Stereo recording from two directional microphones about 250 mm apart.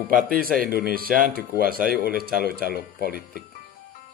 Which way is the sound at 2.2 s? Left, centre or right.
Right.